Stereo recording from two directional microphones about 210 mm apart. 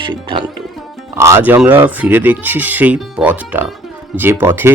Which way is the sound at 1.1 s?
10° right (ahead or behind).